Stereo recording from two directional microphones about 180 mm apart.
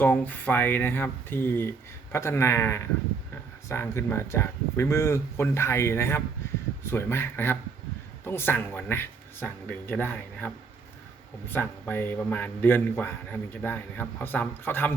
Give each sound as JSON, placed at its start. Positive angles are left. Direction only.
{"t": 0.0, "sound": "a man's voice", "side_deg": 10}